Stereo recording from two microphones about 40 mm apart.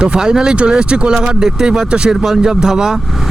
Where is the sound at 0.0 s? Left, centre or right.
Right.